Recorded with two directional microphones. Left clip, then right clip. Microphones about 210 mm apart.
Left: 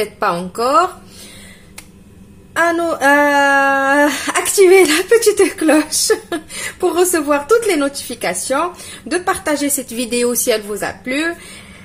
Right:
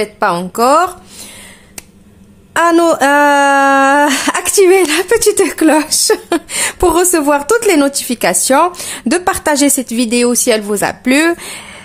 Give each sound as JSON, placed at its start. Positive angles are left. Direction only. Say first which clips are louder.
{"t": 0.0, "sound": "a woman's voice", "louder": "right 4 dB", "side_deg": -25}
{"t": 2.5, "sound": "speech", "louder": "right 6 dB", "side_deg": -45}